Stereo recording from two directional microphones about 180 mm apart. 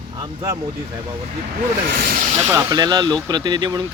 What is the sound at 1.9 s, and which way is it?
Speech, 55° right (ahead or behind).